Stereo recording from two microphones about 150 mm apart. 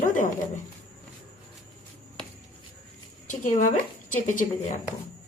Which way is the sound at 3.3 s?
55° left (ahead or behind).